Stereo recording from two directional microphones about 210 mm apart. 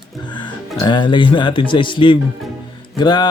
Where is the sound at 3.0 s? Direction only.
20° left (ahead or behind).